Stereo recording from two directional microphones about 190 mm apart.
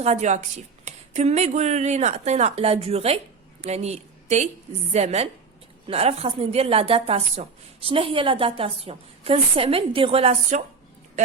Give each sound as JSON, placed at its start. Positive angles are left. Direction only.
{"t": 0.0, "sound": "a woman's voice", "side_deg": -35}